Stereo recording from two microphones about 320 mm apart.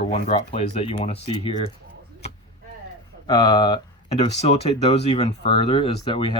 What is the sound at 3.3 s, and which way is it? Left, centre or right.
Speech, centre.